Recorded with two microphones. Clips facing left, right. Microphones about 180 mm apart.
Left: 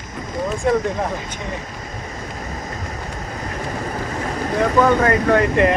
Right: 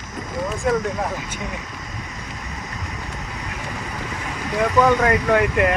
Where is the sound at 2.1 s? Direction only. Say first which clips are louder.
Left 4 dB; 40° left (ahead or behind).